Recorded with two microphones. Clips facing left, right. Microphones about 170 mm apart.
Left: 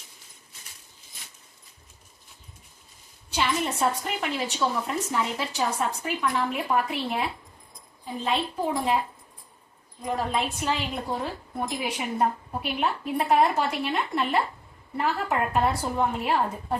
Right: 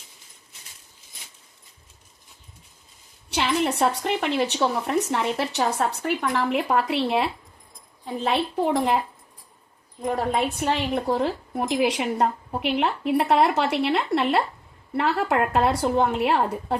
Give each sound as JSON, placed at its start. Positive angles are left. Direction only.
{"t": 3.2, "sound": "a woman's voice", "side_deg": -75}
{"t": 10.0, "sound": "a woman's voice", "side_deg": -55}
{"t": 10.9, "sound": "a woman's voice", "side_deg": -75}